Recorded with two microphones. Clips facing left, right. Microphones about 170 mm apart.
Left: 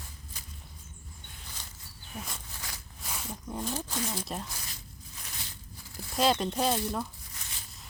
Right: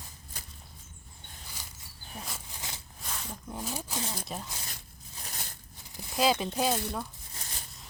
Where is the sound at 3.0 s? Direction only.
5° left (ahead or behind).